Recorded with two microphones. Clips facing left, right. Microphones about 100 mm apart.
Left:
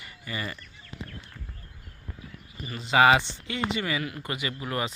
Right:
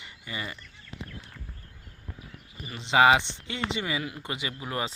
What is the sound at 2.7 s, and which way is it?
Speech, 20° right (ahead or behind).